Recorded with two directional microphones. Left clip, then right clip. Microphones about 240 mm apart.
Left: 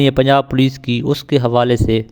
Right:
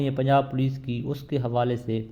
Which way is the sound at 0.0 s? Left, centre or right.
Left.